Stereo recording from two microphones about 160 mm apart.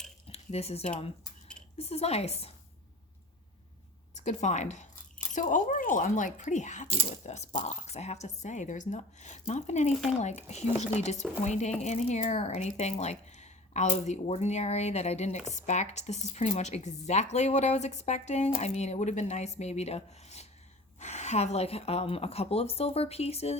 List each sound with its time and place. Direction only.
0.3 s dishes: 40° left (ahead or behind)
1.8 s a woman's voice: 40° left (ahead or behind)
4.1 s speech: 45° left (ahead or behind)
9.9 s speech: centre (ahead or behind)
10.2 s a woman's voice: 45° left (ahead or behind)